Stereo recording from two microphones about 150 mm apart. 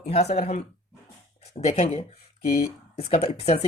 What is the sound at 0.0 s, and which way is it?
Speech, 45° left (ahead or behind).